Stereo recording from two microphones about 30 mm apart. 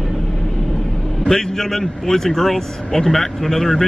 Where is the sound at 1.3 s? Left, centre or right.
Centre.